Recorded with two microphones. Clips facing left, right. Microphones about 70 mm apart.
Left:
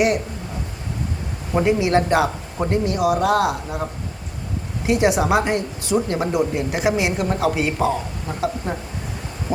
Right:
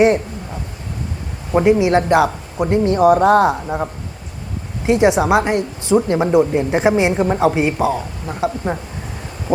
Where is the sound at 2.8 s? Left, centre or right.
Right.